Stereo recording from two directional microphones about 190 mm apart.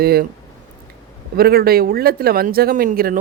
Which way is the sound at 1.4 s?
55° right (ahead or behind).